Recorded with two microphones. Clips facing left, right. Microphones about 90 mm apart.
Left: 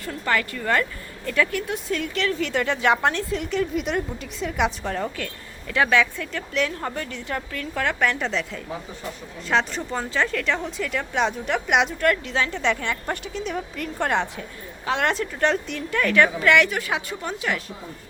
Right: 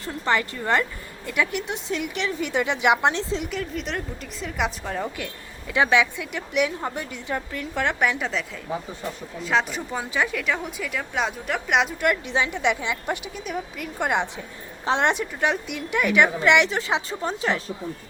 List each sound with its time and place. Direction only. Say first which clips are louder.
0.0 s a woman's voice: right 1 dB; 20° right (ahead or behind)
3.5 s a woman's voice: left 5 dB; centre (ahead or behind)
11.9 s a woman's voice: left 1 dB; 15° right (ahead or behind)
15.2 s a woman's voice: left 2 dB; 10° right (ahead or behind); by 17.6 s 30° right (ahead or behind)